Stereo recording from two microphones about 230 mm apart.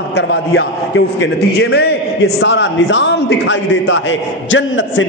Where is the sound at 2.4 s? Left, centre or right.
Left.